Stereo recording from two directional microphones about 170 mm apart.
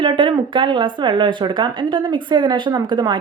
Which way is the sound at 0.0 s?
30° right (ahead or behind).